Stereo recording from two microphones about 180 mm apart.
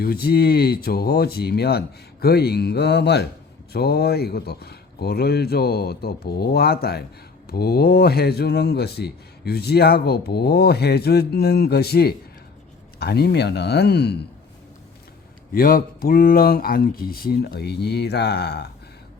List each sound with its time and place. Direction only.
0.0 s speech: 60° left (ahead or behind)
15.5 s speech: 55° left (ahead or behind)